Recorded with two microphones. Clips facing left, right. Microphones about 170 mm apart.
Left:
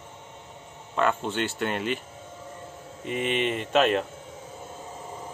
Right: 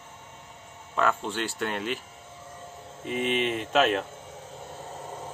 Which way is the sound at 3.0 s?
Centre (ahead or behind).